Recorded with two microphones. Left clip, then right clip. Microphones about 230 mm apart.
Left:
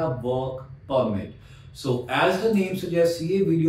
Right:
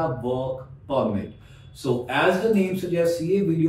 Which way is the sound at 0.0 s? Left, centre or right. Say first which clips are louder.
Even; centre.